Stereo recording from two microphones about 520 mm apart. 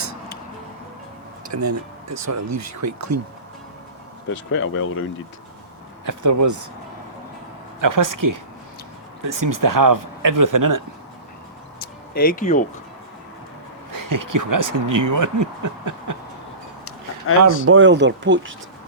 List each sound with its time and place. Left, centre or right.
1.5 s speech: right
4.3 s speech: left
6.1 s speech: right
7.8 s speech: right
12.1 s speech: centre
13.9 s speech: right
17.4 s speech: right